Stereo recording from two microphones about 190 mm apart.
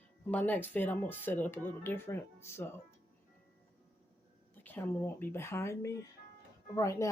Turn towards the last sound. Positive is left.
turn(degrees=15)  # may be behind; listen again after turning